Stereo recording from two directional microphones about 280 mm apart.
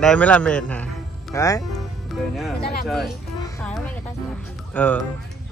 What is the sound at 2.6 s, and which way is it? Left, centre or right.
Speech, left.